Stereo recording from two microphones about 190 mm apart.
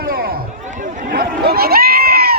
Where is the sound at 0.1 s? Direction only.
50° right (ahead or behind).